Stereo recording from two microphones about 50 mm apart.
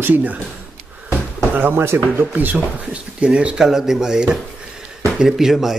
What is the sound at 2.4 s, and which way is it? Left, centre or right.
Speech, right.